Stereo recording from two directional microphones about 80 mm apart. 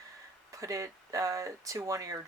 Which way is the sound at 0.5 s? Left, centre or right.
Right.